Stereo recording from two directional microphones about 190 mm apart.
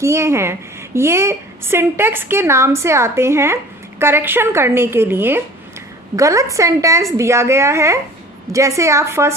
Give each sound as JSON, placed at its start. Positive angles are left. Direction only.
{"t": 0.0, "sound": "a woman's voice", "side_deg": -15}